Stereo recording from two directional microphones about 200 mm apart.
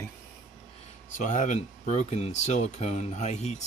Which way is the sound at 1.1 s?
40° left (ahead or behind).